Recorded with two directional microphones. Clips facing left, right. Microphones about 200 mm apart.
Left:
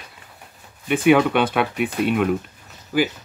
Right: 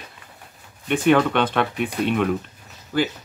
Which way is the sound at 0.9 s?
10° left (ahead or behind).